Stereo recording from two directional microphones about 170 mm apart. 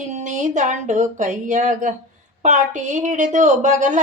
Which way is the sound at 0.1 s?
45° right (ahead or behind).